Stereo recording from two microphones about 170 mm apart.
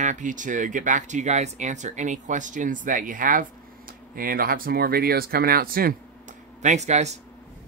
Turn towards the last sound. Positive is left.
turn(degrees=-40)  # may be behind; listen again after turning